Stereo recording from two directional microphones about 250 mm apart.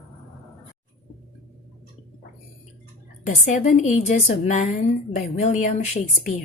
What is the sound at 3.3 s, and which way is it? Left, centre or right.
A woman's voice, left.